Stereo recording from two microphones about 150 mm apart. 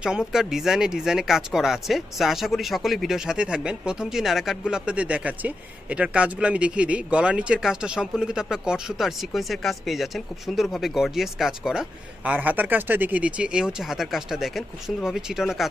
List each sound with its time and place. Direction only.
0.0 s speech: 5° right (ahead or behind)